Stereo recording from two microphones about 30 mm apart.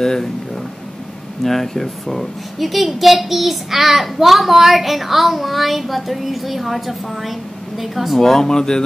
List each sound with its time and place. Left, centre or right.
0.0 s speech: centre
1.4 s a woman's voice: centre
8.2 s speech: centre